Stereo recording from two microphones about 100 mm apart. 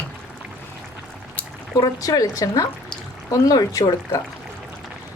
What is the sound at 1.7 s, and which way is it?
A woman's voice, 40° left (ahead or behind).